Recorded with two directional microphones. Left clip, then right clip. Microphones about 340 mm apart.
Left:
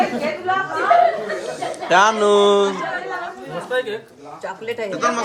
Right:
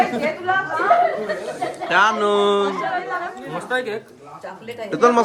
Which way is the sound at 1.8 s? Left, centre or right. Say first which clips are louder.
Left 2 dB; centre.